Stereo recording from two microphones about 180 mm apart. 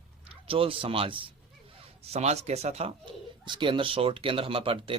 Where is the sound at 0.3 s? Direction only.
30° right (ahead or behind).